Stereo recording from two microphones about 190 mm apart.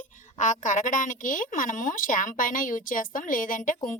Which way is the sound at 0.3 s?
40° left (ahead or behind).